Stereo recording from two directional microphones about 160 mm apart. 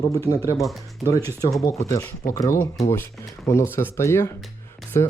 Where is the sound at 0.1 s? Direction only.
20° left (ahead or behind).